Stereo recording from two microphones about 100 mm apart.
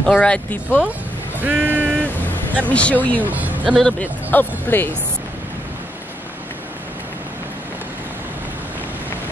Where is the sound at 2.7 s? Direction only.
10° left (ahead or behind).